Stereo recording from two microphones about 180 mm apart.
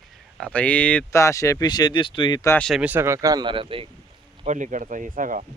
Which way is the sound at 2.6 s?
Centre (ahead or behind).